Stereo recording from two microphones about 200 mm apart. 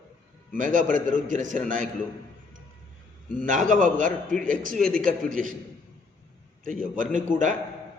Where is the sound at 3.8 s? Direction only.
40° right (ahead or behind).